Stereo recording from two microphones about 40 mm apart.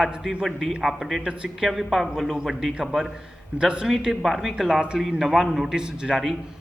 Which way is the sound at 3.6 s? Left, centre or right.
Right.